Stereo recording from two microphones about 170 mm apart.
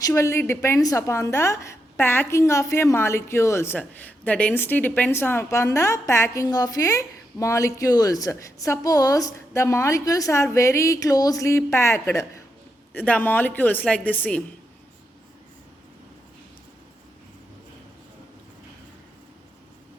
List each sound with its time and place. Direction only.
0.0 s a woman's voice: 15° left (ahead or behind)